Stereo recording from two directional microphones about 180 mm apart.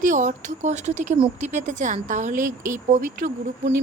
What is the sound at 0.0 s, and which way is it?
Speech, 45° right (ahead or behind).